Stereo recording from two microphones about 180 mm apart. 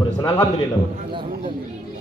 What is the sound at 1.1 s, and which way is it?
Speech, 25° right (ahead or behind).